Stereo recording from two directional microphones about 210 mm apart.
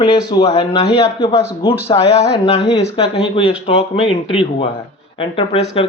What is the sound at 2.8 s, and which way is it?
Speech, 25° left (ahead or behind).